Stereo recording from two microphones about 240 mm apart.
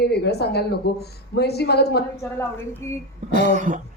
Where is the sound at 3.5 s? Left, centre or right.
Right.